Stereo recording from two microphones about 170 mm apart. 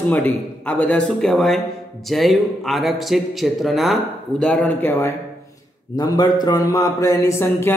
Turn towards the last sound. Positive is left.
turn(degrees=15)  # may be behind; listen again after turning